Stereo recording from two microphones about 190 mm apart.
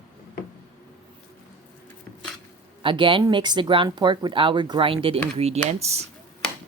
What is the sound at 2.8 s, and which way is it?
Speech, 25° right (ahead or behind).